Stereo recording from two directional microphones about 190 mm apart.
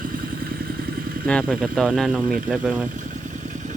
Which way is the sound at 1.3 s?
5° left (ahead or behind).